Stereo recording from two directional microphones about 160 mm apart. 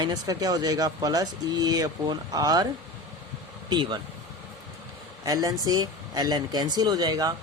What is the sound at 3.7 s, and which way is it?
Speech, 25° right (ahead or behind).